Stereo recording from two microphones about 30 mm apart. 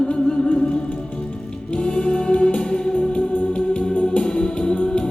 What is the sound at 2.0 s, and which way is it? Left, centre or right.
Music, left.